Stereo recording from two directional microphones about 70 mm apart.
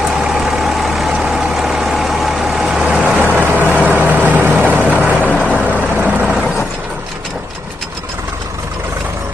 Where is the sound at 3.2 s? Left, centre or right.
Right.